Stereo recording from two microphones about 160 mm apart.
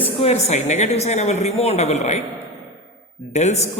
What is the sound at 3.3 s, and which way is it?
Speech, 45° left (ahead or behind).